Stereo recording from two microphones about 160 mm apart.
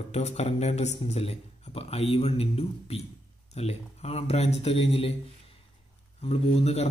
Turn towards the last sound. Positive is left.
turn(degrees=40)  # may be behind; listen again after turning